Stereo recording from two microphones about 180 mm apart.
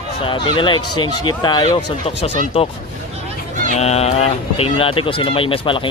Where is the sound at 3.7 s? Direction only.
35° left (ahead or behind).